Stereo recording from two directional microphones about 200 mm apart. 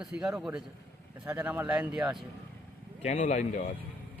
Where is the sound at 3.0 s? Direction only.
35° left (ahead or behind).